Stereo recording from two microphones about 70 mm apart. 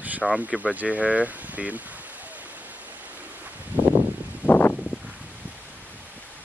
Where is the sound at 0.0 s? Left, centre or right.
Right.